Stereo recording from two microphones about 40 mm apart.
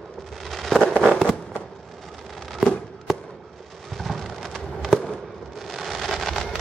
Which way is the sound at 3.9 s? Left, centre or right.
Centre.